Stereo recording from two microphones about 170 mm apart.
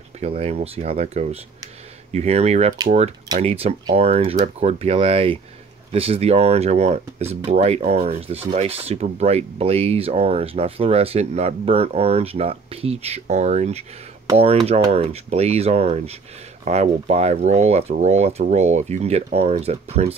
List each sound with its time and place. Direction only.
0.4 s speech: 40° right (ahead or behind)